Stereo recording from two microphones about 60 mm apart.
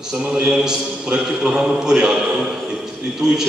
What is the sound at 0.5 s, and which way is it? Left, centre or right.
A man's voice, centre.